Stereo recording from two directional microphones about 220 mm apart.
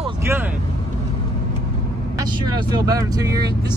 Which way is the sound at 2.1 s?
20° right (ahead or behind).